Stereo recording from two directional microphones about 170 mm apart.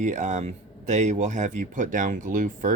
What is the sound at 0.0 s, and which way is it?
Speech, 45° right (ahead or behind).